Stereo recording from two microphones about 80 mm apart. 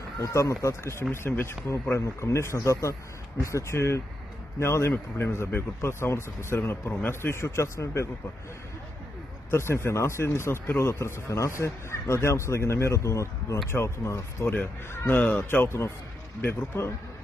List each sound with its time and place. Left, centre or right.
0.2 s speech: left
9.5 s speech: left
14.5 s speech: left